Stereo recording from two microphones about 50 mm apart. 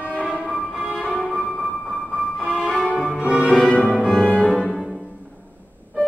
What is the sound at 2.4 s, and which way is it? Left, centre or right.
Violin, centre.